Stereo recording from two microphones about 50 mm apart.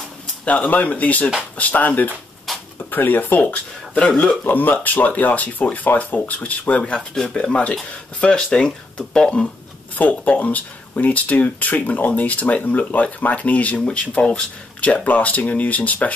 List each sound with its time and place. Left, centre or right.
0.5 s speech: left
4.5 s speech: left
7.0 s speech: centre
7.3 s speech: centre
9.9 s speech: left